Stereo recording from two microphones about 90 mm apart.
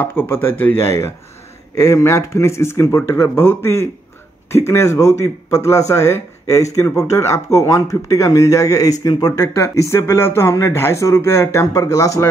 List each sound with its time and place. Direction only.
0.0 s speech: 25° left (ahead or behind)
1.8 s speech: 35° left (ahead or behind)
9.4 s speech: 30° left (ahead or behind)